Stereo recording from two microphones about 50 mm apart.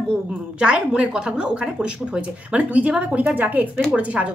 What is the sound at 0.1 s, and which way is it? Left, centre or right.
A woman's voice, centre.